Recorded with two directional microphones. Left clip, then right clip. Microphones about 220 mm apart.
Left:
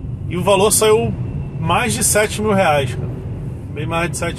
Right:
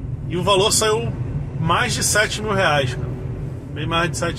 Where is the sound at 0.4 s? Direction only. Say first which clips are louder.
Left 3 dB; 20° left (ahead or behind).